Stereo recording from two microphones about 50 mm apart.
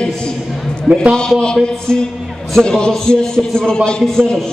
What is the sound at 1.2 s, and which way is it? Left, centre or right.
Music, centre.